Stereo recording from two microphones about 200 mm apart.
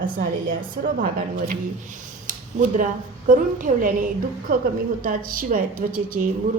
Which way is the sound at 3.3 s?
40° right (ahead or behind).